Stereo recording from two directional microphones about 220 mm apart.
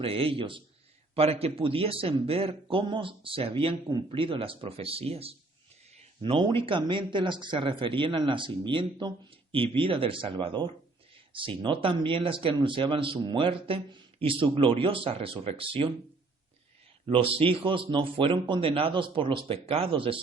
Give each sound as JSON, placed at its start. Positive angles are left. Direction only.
{"t": 0.0, "sound": "a man's voice", "side_deg": -25}
{"t": 17.1, "sound": "a man's voice", "side_deg": -25}